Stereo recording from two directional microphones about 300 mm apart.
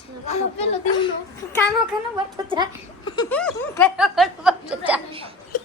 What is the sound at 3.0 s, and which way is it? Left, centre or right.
Speech, centre.